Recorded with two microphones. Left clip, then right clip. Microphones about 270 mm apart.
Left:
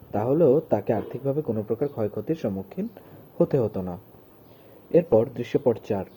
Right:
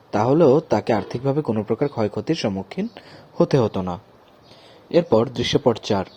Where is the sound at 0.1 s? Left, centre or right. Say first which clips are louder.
Right 4 dB; right.